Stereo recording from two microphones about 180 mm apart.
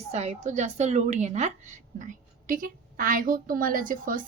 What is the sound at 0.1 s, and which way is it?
A woman's voice, 35° right (ahead or behind).